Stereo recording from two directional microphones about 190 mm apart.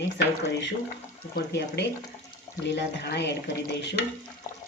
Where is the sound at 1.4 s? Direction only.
60° left (ahead or behind).